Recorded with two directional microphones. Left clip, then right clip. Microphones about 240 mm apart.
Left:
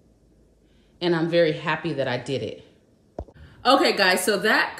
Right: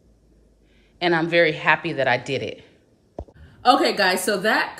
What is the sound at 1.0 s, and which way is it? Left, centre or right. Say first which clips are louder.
Speech: right 2 dB; centre.